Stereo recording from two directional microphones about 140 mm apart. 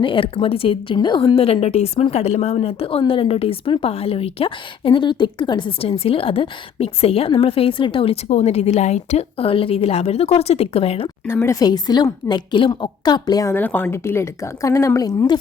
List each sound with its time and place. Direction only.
0.0 s a woman's voice: 35° left (ahead or behind)
11.3 s speech: 15° left (ahead or behind)
11.6 s a woman's voice: 30° left (ahead or behind)
13.5 s a woman's voice: 15° left (ahead or behind)